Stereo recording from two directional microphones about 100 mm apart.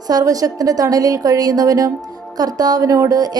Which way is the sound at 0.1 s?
40° right (ahead or behind).